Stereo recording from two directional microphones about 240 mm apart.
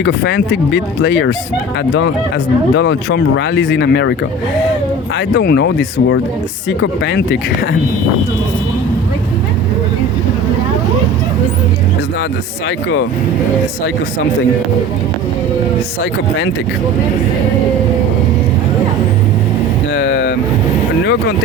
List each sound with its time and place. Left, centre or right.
0.0 s speech: left
2.7 s speech: left
5.3 s speech: left
19.9 s vehicle: left